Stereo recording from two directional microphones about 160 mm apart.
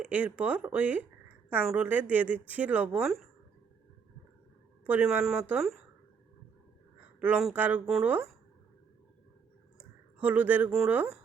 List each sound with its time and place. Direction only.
0.0 s speech: 10° right (ahead or behind)
4.9 s speech: 5° right (ahead or behind)
7.2 s speech: 5° right (ahead or behind)
10.2 s speech: 10° right (ahead or behind)